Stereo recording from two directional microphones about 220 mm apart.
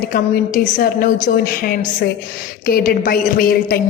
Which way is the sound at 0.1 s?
40° left (ahead or behind).